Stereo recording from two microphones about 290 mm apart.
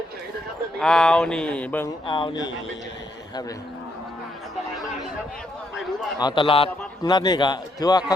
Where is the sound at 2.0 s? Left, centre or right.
Centre.